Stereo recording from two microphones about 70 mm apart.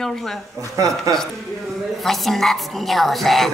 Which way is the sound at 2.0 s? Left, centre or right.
Centre.